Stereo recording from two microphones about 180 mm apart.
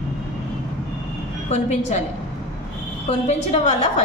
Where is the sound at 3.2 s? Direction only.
40° left (ahead or behind).